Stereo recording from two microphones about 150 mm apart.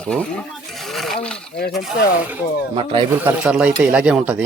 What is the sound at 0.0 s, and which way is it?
Speech, 5° left (ahead or behind).